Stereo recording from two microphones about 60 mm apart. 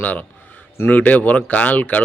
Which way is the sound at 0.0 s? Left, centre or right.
Left.